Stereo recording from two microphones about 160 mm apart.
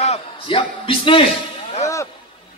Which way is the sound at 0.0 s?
40° left (ahead or behind).